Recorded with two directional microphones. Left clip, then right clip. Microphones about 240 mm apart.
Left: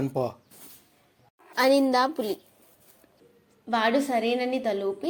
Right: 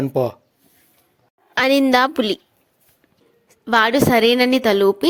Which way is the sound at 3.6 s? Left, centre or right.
Right.